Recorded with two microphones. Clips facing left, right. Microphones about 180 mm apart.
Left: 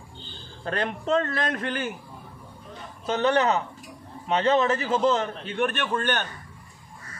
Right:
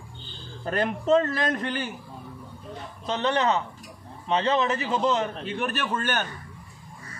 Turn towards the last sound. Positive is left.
turn(degrees=-5)  # may be behind; listen again after turning